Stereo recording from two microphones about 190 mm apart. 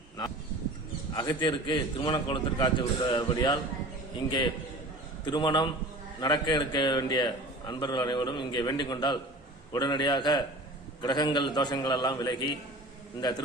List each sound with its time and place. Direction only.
1.1 s a man's voice: 20° left (ahead or behind)
5.2 s a man's voice: 25° left (ahead or behind)